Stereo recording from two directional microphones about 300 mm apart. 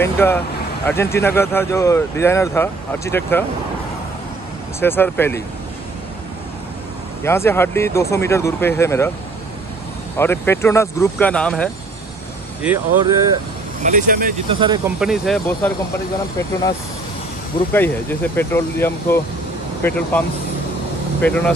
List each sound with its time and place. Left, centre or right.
0.0 s speech: centre
4.7 s speech: centre
7.2 s speech: centre
10.1 s speech: centre
12.6 s speech: centre
13.8 s speech: right
15.0 s speech: centre
17.7 s speech: centre